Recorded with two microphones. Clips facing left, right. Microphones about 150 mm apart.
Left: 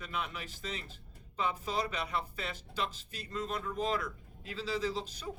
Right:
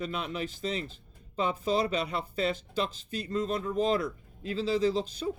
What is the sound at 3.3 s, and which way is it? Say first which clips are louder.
Speech: right 7 dB; 30° right (ahead or behind).